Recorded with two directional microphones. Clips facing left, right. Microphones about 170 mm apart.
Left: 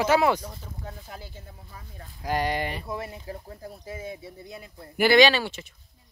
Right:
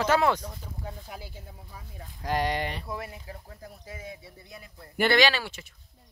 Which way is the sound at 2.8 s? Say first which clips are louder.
Left 3 dB; 25° left (ahead or behind).